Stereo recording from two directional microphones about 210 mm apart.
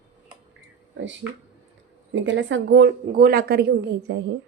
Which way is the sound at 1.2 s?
10° right (ahead or behind).